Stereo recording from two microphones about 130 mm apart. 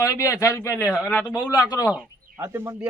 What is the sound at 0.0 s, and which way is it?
Speech, 20° left (ahead or behind).